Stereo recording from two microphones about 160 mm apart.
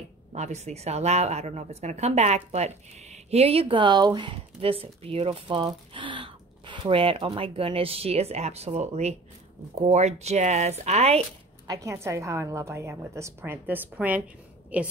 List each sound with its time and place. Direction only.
0.3 s a woman's voice: 45° right (ahead or behind)
11.6 s a woman's voice: 20° right (ahead or behind)